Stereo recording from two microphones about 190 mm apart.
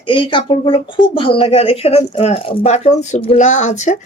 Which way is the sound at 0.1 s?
25° left (ahead or behind).